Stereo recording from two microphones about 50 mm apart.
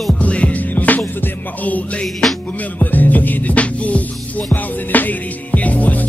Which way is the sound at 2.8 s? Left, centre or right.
Left.